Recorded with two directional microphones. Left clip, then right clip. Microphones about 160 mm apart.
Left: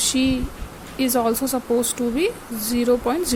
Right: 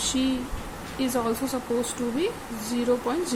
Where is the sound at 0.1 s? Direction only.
50° left (ahead or behind).